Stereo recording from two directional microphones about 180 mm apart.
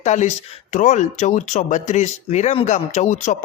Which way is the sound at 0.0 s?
40° left (ahead or behind).